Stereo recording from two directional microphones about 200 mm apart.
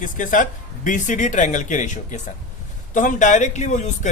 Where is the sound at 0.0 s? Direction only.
40° left (ahead or behind).